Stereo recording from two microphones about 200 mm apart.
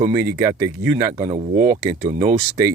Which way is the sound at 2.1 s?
35° right (ahead or behind).